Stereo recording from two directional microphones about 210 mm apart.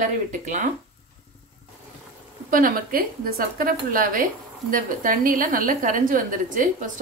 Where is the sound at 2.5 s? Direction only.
40° right (ahead or behind).